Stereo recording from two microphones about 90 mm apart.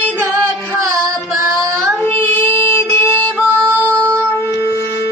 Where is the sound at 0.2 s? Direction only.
25° right (ahead or behind).